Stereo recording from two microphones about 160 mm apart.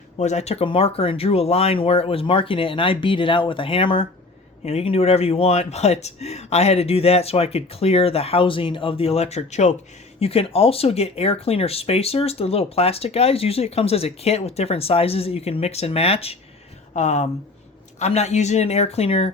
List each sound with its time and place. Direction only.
0.2 s speech: 45° left (ahead or behind)